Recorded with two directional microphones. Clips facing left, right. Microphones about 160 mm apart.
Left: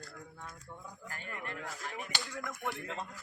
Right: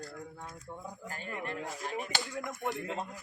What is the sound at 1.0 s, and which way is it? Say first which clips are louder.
Speech: right 4 dB; 25° right (ahead or behind).